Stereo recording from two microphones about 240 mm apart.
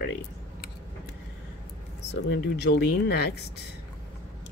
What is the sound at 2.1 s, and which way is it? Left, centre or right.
Speech, left.